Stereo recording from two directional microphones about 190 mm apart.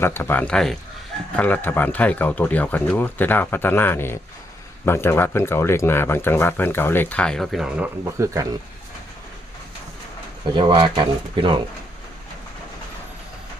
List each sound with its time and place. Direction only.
0.0 s speech: 10° left (ahead or behind)
8.2 s speech: 15° right (ahead or behind)
10.5 s speech: 25° right (ahead or behind)